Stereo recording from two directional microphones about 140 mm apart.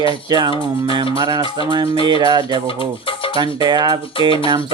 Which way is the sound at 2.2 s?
30° right (ahead or behind).